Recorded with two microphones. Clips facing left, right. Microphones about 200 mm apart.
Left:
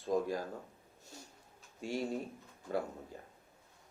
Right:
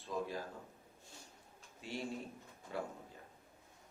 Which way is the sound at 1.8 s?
45° left (ahead or behind).